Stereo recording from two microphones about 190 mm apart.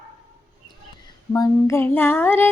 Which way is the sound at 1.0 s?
15° left (ahead or behind).